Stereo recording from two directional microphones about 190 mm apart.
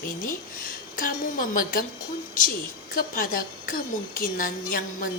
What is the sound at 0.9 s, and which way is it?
Speech, 45° left (ahead or behind).